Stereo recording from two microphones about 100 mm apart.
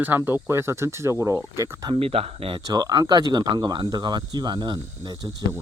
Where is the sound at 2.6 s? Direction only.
40° right (ahead or behind).